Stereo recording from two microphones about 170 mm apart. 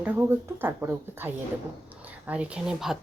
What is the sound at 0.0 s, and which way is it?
Speech, 10° right (ahead or behind).